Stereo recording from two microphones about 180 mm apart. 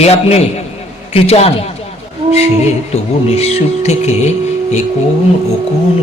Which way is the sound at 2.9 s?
35° left (ahead or behind).